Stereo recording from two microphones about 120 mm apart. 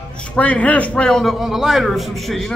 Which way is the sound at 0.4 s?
10° left (ahead or behind).